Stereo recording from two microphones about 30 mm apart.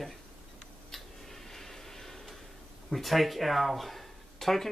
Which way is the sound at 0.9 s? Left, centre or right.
Centre.